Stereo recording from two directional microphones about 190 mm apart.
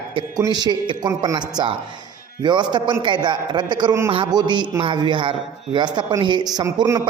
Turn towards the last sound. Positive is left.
turn(degrees=-15)  # may be behind; listen again after turning